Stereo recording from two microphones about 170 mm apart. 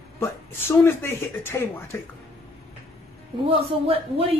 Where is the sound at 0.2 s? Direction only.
15° left (ahead or behind).